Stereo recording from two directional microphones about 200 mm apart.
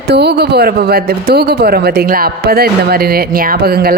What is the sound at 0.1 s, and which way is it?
Speech, 55° right (ahead or behind).